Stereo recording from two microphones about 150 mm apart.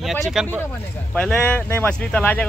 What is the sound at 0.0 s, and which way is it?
Speech, centre (ahead or behind).